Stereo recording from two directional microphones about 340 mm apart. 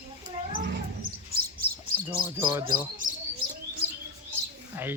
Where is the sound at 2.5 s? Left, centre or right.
Centre.